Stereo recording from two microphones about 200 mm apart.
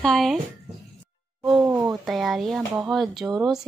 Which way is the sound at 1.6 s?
15° right (ahead or behind).